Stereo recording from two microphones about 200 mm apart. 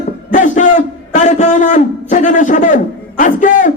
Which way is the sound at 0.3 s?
40° left (ahead or behind).